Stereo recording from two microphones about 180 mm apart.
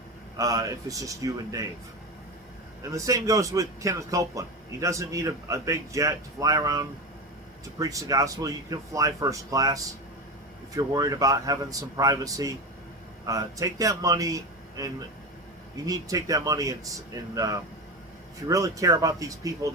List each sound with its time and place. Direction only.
0.3 s speech: 20° right (ahead or behind)
2.9 s speech: 20° right (ahead or behind)